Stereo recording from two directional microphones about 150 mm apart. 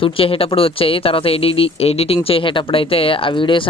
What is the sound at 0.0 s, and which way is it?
Speech, 40° left (ahead or behind).